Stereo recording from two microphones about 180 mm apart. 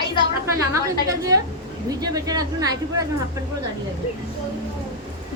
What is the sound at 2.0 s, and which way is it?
Speech, 20° right (ahead or behind).